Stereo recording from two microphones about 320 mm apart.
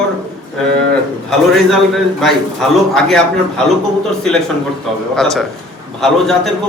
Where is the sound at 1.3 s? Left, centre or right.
Centre.